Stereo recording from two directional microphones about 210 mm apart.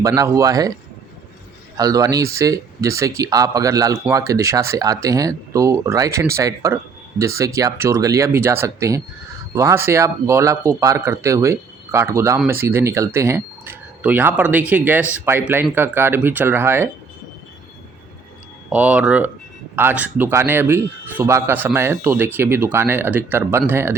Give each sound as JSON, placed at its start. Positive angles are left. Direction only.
{"t": 0.0, "sound": "a man's voice", "side_deg": -15}
{"t": 1.7, "sound": "a man's voice", "side_deg": -15}
{"t": 18.7, "sound": "a man's voice", "side_deg": -5}